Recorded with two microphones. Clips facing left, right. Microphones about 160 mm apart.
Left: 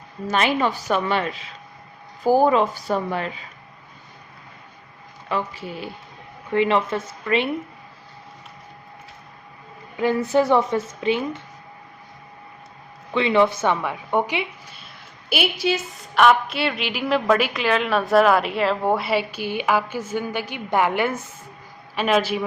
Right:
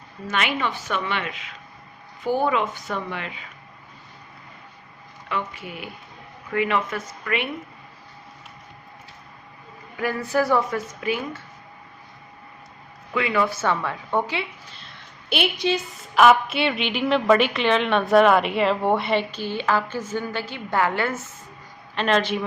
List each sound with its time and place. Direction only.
0.3 s a woman's voice: 35° left (ahead or behind)
5.3 s a woman's voice: 30° left (ahead or behind)
10.0 s a woman's voice: 20° left (ahead or behind)
13.1 s a woman's voice: 25° left (ahead or behind)
15.3 s a woman's voice: 5° left (ahead or behind)